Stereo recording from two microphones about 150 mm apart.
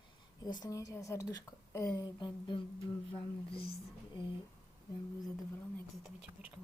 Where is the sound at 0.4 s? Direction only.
25° left (ahead or behind).